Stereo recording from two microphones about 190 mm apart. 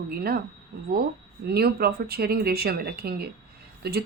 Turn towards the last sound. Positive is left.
turn(degrees=-55)  # may be behind; listen again after turning